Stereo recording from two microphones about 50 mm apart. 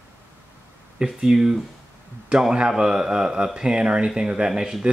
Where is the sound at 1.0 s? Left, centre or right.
Centre.